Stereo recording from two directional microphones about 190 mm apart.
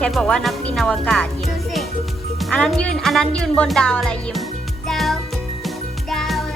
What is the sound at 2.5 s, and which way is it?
Speech, 5° left (ahead or behind).